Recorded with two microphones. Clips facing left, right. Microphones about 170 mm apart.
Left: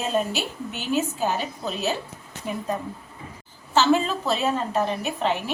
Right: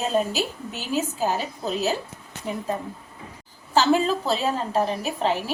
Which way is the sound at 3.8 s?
35° right (ahead or behind).